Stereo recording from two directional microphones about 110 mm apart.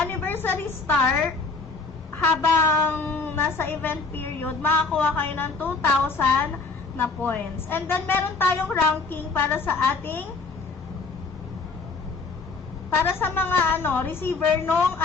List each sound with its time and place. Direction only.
0.0 s a sound: 20° left (ahead or behind)
2.1 s a woman's voice: 20° left (ahead or behind)
13.1 s a woman's voice: 20° left (ahead or behind)